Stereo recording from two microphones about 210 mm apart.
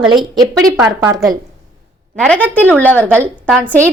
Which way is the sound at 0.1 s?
20° right (ahead or behind).